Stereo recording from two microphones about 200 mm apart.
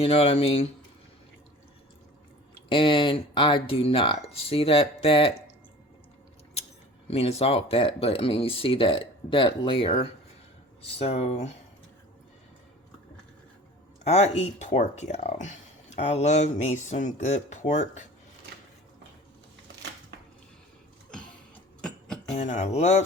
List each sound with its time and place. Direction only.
0.0 s speech: 30° left (ahead or behind)
2.6 s speech: 25° left (ahead or behind)
7.1 s speech: 30° left (ahead or behind)
14.0 s speech: 30° left (ahead or behind)
21.8 s music: 5° left (ahead or behind)
22.4 s speech: 35° left (ahead or behind)